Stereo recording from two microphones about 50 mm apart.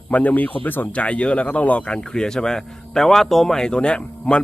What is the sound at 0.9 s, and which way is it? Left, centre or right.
Speech, left.